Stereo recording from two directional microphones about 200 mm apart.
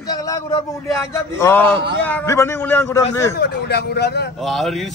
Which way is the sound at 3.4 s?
55° left (ahead or behind).